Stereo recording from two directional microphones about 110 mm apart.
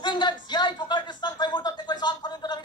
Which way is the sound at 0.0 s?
45° left (ahead or behind).